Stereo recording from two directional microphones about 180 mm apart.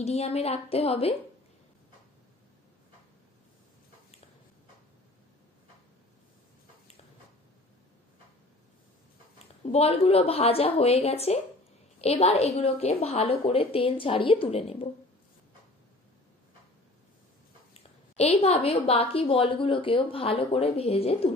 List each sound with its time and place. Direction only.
0.0 s a woman's voice: 35° left (ahead or behind)
9.7 s a woman's voice: 35° left (ahead or behind)
18.3 s a woman's voice: 35° left (ahead or behind)